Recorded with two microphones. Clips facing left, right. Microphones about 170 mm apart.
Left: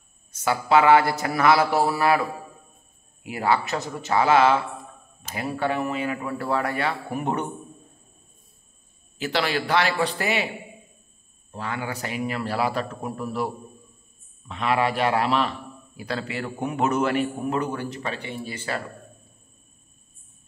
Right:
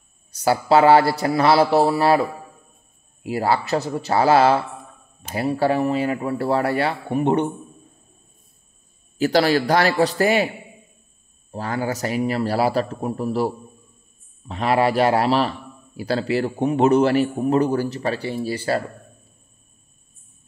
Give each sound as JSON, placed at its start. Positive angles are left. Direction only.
{"t": 0.3, "sound": "a man's voice", "side_deg": -35}
{"t": 3.3, "sound": "a man's voice", "side_deg": -35}
{"t": 9.2, "sound": "a man's voice", "side_deg": -40}
{"t": 11.5, "sound": "a man's voice", "side_deg": -35}
{"t": 14.5, "sound": "a man's voice", "side_deg": -35}